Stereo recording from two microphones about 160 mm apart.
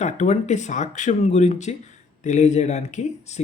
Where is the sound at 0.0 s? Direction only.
45° left (ahead or behind).